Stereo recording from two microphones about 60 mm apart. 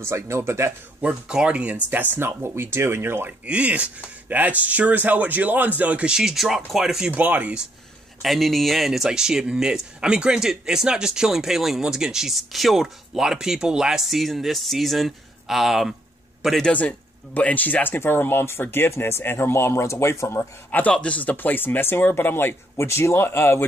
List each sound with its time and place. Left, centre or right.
0.0 s speech: right
1.3 s speech: centre
1.9 s speech: right
3.3 s speech: right
6.1 s speech: centre
7.2 s speech: right
8.2 s speech: centre
16.7 s speech: left
20.7 s speech: left